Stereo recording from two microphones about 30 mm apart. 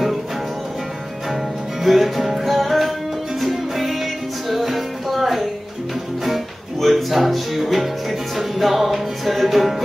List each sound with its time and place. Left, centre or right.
1.8 s music: centre
6.8 s music: centre